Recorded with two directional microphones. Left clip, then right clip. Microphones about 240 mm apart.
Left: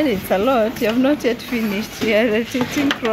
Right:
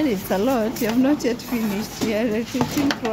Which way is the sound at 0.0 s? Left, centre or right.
Centre.